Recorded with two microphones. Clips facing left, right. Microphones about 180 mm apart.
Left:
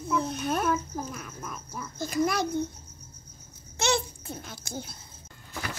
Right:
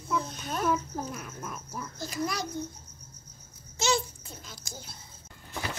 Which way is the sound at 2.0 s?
55° left (ahead or behind).